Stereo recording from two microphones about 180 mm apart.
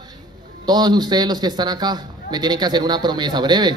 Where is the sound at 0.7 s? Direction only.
25° right (ahead or behind).